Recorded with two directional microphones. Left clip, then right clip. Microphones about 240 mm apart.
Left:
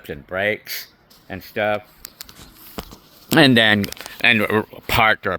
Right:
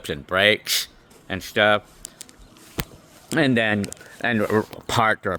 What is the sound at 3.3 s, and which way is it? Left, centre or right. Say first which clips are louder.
Speech: left 7 dB; left.